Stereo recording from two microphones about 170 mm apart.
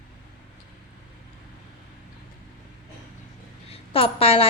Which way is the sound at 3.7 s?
35° left (ahead or behind).